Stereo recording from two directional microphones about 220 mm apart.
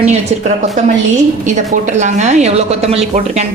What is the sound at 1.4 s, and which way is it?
A woman's voice, 35° right (ahead or behind).